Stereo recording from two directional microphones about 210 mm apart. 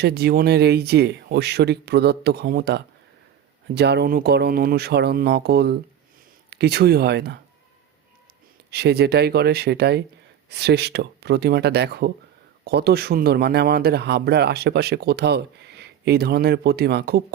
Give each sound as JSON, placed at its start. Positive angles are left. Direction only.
{"t": 0.0, "sound": "speech", "side_deg": -50}
{"t": 8.7, "sound": "speech", "side_deg": -50}